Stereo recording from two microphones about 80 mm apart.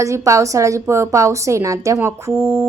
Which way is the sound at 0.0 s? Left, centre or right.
Right.